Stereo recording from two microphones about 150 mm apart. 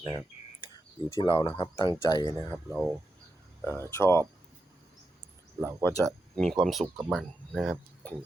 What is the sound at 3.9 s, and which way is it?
Speech, 15° left (ahead or behind).